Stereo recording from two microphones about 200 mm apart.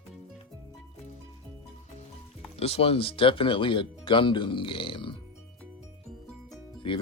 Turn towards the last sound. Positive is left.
turn(degrees=25)  # may be behind; listen again after turning